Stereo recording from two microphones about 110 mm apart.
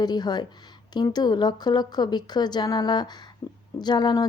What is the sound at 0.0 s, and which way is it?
A woman's voice, 40° left (ahead or behind).